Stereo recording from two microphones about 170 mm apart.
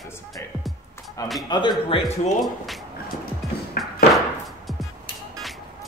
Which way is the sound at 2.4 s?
Centre (ahead or behind).